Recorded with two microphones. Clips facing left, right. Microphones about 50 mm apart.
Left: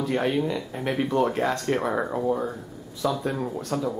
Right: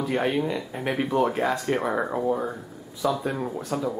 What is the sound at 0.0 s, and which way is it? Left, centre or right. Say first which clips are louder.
Speech: even; centre.